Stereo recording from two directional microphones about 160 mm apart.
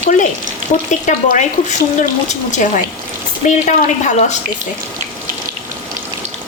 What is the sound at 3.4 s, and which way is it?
Speech, 50° left (ahead or behind).